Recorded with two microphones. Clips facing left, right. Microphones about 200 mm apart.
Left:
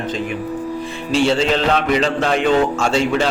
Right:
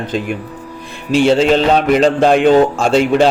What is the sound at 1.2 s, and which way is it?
Speech, 55° right (ahead or behind).